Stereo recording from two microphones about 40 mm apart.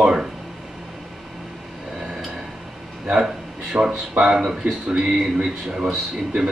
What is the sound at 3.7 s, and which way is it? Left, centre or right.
Speech, right.